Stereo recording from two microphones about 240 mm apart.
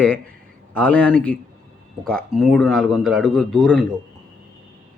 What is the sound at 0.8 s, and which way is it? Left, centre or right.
Speech, centre.